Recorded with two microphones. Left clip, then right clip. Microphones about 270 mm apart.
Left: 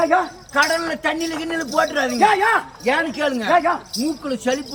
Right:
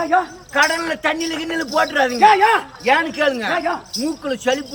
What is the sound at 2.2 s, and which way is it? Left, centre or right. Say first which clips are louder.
Speech: right 3 dB; centre.